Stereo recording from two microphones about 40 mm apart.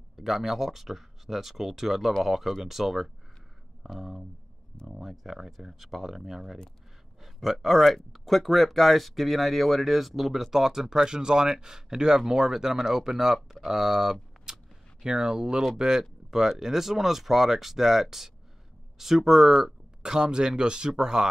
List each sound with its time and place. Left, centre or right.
0.1 s speech: centre
14.3 s a sound: centre
15.0 s speech: centre
20.0 s speech: centre